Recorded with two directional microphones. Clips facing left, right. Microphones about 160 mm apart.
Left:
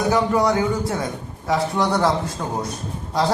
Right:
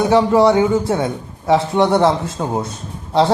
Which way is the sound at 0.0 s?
30° right (ahead or behind).